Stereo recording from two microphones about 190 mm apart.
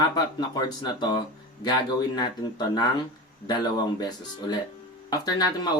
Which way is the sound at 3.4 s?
20° left (ahead or behind).